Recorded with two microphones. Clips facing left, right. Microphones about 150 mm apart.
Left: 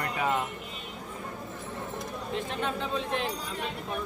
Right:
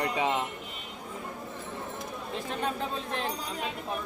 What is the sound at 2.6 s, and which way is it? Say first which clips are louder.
Speech: even; 40° right (ahead or behind).